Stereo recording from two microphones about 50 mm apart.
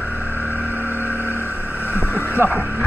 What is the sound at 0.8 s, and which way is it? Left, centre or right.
Vehicle, right.